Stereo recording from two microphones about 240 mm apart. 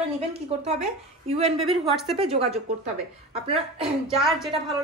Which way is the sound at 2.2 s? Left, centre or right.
Right.